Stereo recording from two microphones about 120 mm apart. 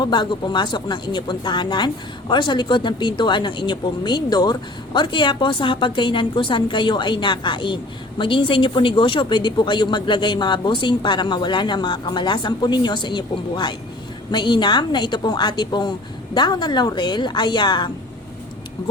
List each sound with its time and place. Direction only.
0.0 s a woman's voice: 40° left (ahead or behind)